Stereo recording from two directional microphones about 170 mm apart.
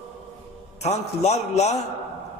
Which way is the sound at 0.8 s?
40° left (ahead or behind).